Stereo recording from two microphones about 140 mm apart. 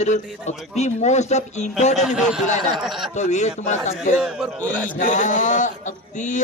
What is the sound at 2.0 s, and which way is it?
A man's voice, 5° right (ahead or behind).